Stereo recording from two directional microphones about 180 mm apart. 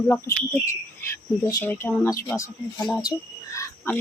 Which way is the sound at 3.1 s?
15° left (ahead or behind).